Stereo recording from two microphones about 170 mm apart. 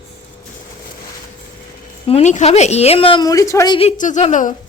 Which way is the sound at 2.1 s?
40° left (ahead or behind).